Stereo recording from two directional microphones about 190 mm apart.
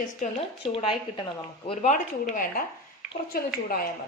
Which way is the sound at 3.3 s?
50° left (ahead or behind).